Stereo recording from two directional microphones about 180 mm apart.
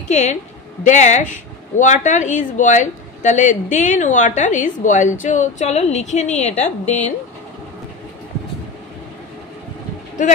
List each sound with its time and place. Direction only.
0.1 s a woman's voice: 40° left (ahead or behind)
6.6 s a woman's voice: 10° left (ahead or behind)